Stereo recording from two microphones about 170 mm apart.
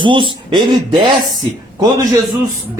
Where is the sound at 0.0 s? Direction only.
30° right (ahead or behind).